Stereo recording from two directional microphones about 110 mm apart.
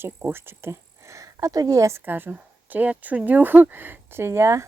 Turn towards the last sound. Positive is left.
turn(degrees=-25)  # may be behind; listen again after turning